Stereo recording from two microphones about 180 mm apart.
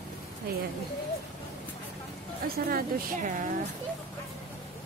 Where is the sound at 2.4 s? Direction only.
55° right (ahead or behind).